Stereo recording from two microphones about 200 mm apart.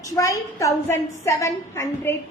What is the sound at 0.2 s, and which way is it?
A woman's voice, 15° left (ahead or behind).